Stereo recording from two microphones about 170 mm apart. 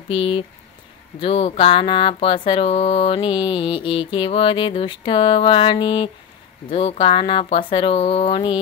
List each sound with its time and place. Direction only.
0.1 s speech: 30° left (ahead or behind)